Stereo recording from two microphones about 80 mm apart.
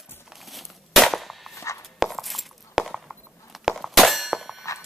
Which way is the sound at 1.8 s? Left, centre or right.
Centre.